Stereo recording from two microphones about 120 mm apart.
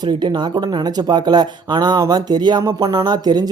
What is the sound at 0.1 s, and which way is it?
Speech, 40° right (ahead or behind).